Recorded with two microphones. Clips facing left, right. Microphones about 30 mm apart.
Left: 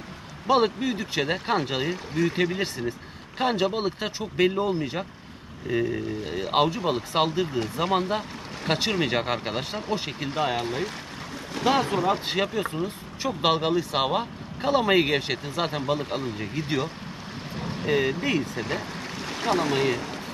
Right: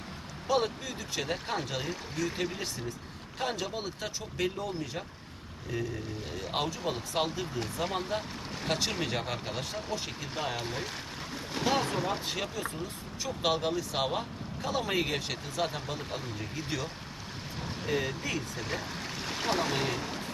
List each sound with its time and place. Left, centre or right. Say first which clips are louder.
0.4 s speech: left 8 dB; left
10.2 s speech: left 9 dB; left
10.7 s speech: left 7 dB; centre
11.6 s speech: left 7 dB; left
12.2 s speech: left 8 dB; left
18.6 s a sound: left 5 dB; centre